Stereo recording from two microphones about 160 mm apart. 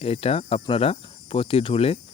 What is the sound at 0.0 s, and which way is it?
Speech, 40° left (ahead or behind).